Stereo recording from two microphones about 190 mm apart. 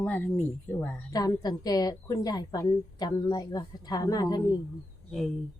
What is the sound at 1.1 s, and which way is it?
A woman's voice, 20° left (ahead or behind).